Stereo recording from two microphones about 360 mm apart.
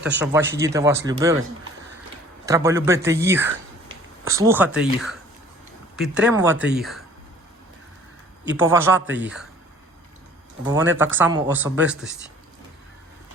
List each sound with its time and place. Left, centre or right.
0.2 s speech: centre
2.5 s speech: centre
8.4 s speech: centre
9.0 s speech: right
9.2 s speech: centre
10.7 s speech: centre